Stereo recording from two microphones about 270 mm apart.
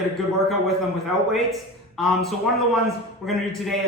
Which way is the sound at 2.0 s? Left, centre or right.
Centre.